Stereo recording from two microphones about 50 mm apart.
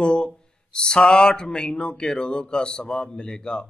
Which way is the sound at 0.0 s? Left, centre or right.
Centre.